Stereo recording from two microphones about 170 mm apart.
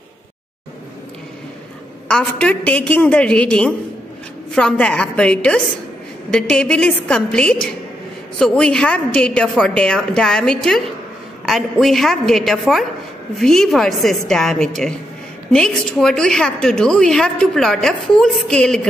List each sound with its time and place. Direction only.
2.0 s a woman's voice: 5° left (ahead or behind)